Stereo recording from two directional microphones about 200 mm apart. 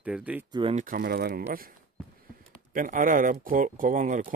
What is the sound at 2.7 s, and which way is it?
Speech, 45° right (ahead or behind).